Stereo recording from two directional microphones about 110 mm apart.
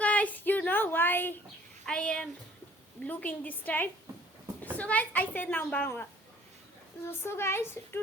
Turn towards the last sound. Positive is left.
turn(degrees=20)  # may be behind; listen again after turning